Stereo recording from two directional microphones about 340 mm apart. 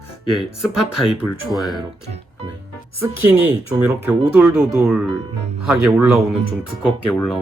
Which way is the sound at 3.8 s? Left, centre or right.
Centre.